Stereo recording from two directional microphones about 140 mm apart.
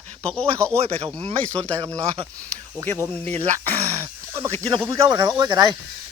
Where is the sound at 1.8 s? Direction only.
20° right (ahead or behind).